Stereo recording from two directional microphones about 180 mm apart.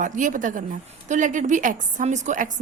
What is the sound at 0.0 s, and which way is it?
A woman's voice, 45° right (ahead or behind).